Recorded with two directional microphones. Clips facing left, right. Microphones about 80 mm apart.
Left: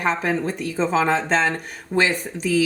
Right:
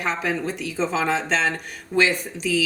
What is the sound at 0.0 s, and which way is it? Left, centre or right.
A woman's voice, left.